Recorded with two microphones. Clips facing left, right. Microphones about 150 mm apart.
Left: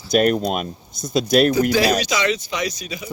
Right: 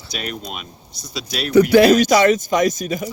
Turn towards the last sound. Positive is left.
turn(degrees=-50)  # may be behind; listen again after turning